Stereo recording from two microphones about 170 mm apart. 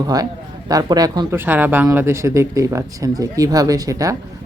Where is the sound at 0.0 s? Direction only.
20° right (ahead or behind).